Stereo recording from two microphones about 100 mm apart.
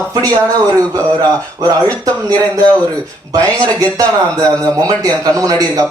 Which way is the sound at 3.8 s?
40° right (ahead or behind).